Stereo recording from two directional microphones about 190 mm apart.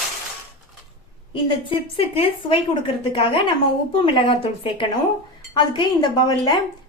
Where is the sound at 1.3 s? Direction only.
30° left (ahead or behind).